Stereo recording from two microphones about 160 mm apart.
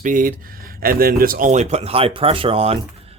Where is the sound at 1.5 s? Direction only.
45° right (ahead or behind).